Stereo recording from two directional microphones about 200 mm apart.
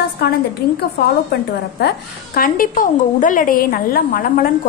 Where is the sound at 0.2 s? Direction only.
55° left (ahead or behind).